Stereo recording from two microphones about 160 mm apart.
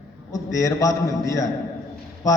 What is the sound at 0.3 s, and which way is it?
A man's voice, 20° left (ahead or behind).